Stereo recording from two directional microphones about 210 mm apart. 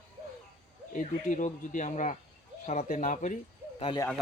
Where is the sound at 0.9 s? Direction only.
40° left (ahead or behind).